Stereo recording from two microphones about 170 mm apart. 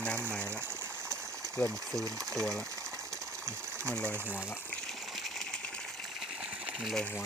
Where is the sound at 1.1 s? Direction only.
5° left (ahead or behind).